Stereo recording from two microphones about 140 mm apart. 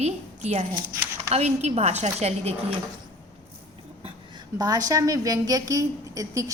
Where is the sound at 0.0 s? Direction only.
55° right (ahead or behind).